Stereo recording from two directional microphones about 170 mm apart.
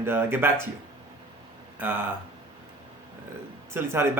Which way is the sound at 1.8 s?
10° right (ahead or behind).